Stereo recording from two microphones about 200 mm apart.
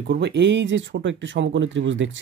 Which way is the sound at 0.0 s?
55° right (ahead or behind).